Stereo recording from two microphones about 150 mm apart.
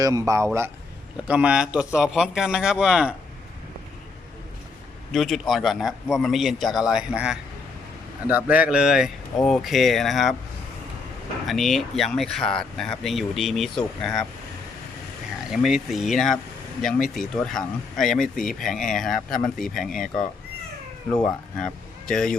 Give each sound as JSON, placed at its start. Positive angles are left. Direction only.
{"t": 0.0, "sound": "speech", "side_deg": -20}
{"t": 1.3, "sound": "speech", "side_deg": -10}
{"t": 5.1, "sound": "speech", "side_deg": 0}
{"t": 11.4, "sound": "speech", "side_deg": 0}
{"t": 15.6, "sound": "speech", "side_deg": 0}
{"t": 21.2, "sound": "speech", "side_deg": 5}